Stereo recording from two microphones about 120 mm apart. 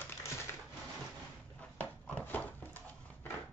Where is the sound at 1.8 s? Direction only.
15° left (ahead or behind).